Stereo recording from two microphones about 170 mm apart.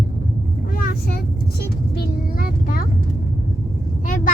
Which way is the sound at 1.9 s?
60° left (ahead or behind).